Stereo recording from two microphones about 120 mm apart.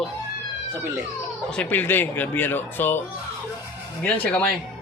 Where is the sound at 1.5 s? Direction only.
15° left (ahead or behind).